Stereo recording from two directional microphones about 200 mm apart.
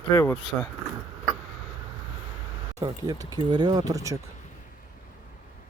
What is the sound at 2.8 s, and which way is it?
Speech, 20° right (ahead or behind).